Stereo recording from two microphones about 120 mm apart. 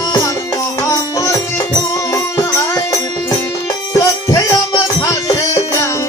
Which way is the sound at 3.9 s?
25° left (ahead or behind).